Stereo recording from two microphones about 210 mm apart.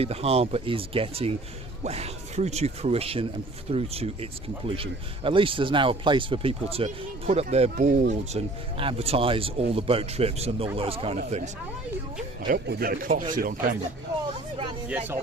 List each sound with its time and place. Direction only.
0.0 s speech: 30° right (ahead or behind)
12.5 s speech: 50° right (ahead or behind)
14.8 s speech: 10° right (ahead or behind)